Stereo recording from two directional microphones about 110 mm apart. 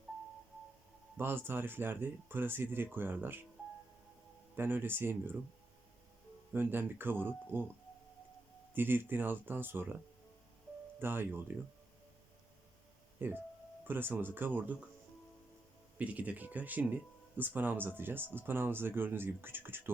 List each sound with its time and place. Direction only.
1.1 s speech: 20° right (ahead or behind)
4.5 s speech: 20° right (ahead or behind)
6.5 s speech: 20° right (ahead or behind)
8.7 s speech: 20° right (ahead or behind)
11.0 s speech: 20° right (ahead or behind)
13.2 s speech: 20° right (ahead or behind)
16.0 s speech: 15° right (ahead or behind)